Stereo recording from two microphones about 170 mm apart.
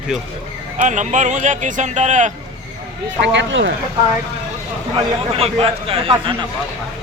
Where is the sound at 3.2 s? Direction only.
90° right.